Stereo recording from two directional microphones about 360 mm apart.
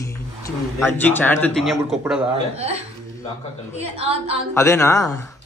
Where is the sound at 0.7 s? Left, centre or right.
Centre.